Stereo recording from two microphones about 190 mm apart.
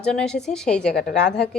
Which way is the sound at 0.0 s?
5° left (ahead or behind).